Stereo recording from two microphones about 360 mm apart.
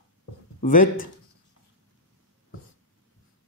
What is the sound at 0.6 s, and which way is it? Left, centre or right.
Speech, left.